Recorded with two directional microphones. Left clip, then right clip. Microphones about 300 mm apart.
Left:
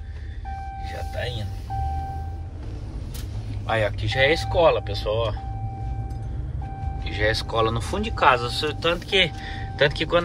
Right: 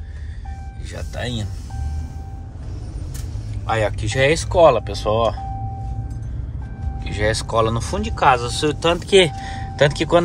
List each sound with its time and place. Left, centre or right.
3.6 s speech: centre
7.2 s speech: centre